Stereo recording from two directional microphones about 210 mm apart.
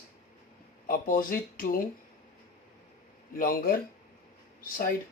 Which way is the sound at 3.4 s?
45° left (ahead or behind).